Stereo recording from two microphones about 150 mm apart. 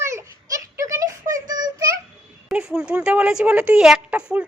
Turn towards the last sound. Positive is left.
turn(degrees=-5)  # may be behind; listen again after turning